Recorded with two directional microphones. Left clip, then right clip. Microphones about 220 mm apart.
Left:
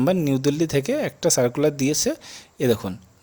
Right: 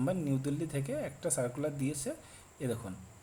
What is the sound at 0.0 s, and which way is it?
Speech, 45° left (ahead or behind).